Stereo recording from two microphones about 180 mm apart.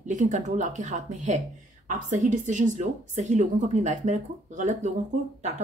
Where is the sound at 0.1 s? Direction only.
40° right (ahead or behind).